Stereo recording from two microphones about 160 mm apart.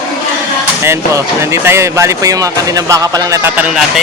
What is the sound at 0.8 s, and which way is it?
Speech, 15° right (ahead or behind).